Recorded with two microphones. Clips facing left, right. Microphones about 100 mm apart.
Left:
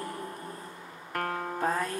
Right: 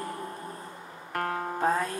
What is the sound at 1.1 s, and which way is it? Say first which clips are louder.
Music: right 2 dB; 25° right (ahead or behind).